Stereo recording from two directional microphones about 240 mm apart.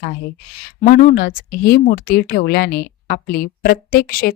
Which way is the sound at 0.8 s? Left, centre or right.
Left.